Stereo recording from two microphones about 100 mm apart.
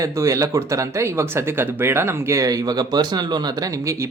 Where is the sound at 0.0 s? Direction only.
30° right (ahead or behind).